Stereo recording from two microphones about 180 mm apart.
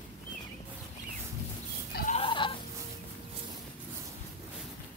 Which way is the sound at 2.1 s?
30° left (ahead or behind).